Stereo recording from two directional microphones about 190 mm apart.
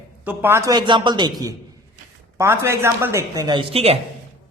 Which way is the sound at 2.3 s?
15° right (ahead or behind).